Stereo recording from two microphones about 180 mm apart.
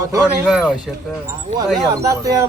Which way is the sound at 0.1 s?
20° right (ahead or behind).